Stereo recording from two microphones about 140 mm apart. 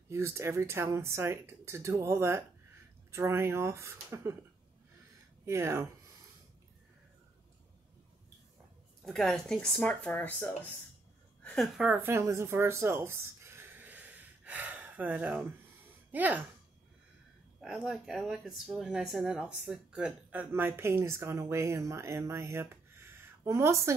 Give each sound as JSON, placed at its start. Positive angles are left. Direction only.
{"t": 0.1, "sound": "speech", "side_deg": -20}
{"t": 5.4, "sound": "speech", "side_deg": -20}
{"t": 9.0, "sound": "speech", "side_deg": 0}
{"t": 11.4, "sound": "speech", "side_deg": 0}
{"t": 17.6, "sound": "speech", "side_deg": -5}